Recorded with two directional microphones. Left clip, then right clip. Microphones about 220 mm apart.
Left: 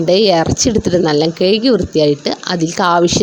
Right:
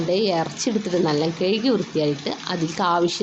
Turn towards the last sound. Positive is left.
turn(degrees=35)  # may be behind; listen again after turning